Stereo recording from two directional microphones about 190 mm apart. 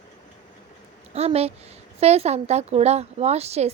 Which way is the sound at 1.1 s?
35° right (ahead or behind).